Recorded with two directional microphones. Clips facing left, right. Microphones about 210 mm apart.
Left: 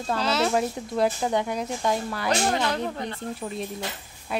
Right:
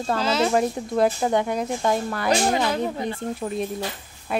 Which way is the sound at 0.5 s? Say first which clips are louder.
Right 4 dB; 50° right (ahead or behind).